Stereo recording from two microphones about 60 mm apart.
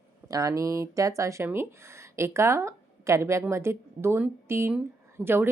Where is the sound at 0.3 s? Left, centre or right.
Right.